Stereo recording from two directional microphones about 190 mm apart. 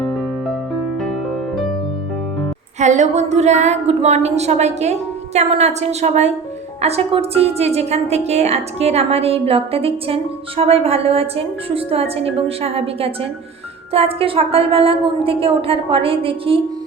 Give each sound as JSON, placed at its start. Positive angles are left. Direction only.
{"t": 2.7, "sound": "a woman's voice", "side_deg": -40}